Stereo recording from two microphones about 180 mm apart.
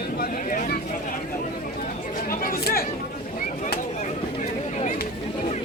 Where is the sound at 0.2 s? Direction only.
50° left (ahead or behind).